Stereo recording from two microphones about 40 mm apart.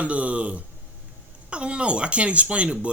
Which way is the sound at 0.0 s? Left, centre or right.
Right.